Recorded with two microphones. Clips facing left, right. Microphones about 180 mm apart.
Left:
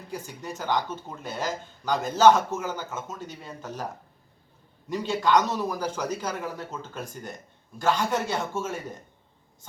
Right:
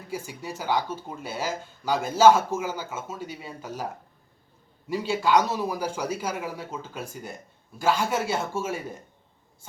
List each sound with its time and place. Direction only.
0.1 s speech: 10° right (ahead or behind)